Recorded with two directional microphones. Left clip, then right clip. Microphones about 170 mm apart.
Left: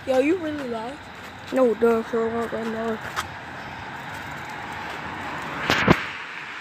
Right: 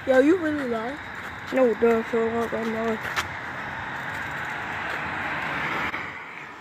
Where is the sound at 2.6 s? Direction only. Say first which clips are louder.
Right 1 dB; 15° right (ahead or behind).